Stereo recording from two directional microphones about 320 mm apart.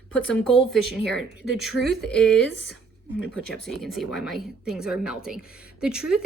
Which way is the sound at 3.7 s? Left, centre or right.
Centre.